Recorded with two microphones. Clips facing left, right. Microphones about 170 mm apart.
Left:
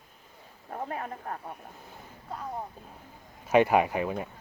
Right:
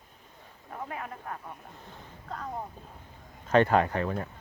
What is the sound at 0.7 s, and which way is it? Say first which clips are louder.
Speech: left 3 dB; 40° left (ahead or behind).